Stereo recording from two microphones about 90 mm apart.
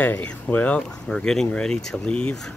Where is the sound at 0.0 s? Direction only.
20° left (ahead or behind).